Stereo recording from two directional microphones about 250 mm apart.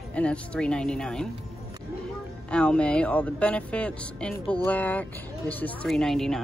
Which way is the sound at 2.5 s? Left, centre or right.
Centre.